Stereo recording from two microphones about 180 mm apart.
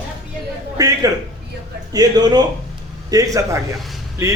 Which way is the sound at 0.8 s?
20° right (ahead or behind).